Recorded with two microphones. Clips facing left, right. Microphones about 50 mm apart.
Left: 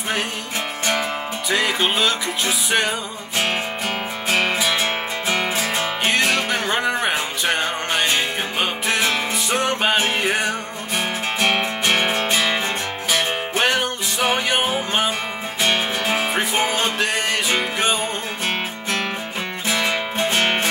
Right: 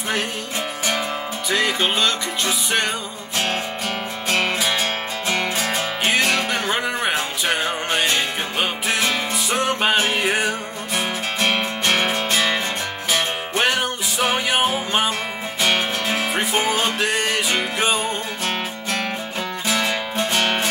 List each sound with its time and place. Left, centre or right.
1.5 s music: centre
3.3 s music: centre
11.3 s music: left
13.6 s music: centre
16.3 s music: centre
19.8 s music: left